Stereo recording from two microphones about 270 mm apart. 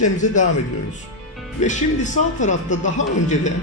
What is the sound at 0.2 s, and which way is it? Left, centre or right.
Speech, left.